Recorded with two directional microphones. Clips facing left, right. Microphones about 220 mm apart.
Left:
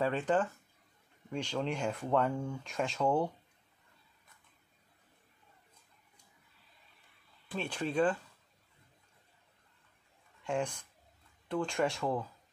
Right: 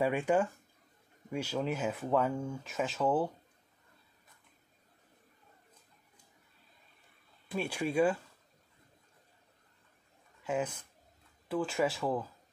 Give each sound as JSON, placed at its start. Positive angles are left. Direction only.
{"t": 0.0, "sound": "speech", "side_deg": -10}
{"t": 7.5, "sound": "speech", "side_deg": -10}
{"t": 10.4, "sound": "speech", "side_deg": -5}